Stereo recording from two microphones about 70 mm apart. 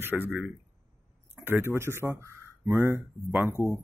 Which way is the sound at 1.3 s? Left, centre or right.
Right.